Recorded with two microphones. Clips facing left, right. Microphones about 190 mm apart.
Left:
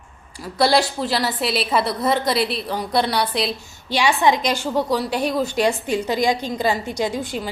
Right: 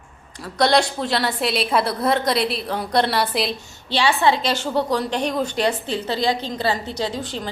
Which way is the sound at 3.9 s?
15° left (ahead or behind).